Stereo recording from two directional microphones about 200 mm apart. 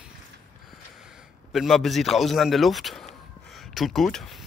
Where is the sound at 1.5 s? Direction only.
Centre (ahead or behind).